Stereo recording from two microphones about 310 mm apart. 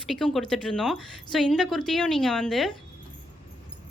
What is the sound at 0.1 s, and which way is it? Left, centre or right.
A woman's voice, centre.